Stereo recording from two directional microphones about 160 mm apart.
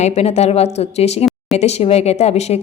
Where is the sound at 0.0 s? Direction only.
40° left (ahead or behind).